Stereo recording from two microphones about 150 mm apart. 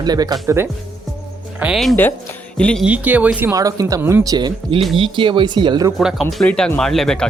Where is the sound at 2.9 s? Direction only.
10° right (ahead or behind).